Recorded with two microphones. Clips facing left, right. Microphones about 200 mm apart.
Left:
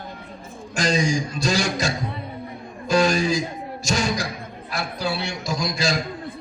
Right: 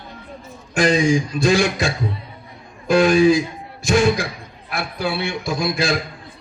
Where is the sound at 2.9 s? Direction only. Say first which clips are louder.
Right 6 dB; 55° right (ahead or behind).